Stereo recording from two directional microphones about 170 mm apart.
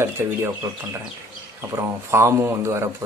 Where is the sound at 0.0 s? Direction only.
15° right (ahead or behind).